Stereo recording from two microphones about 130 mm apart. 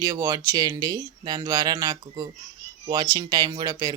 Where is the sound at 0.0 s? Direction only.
25° right (ahead or behind).